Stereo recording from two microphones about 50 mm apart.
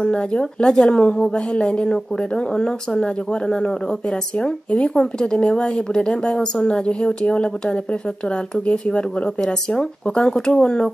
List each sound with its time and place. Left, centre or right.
0.0 s speech: centre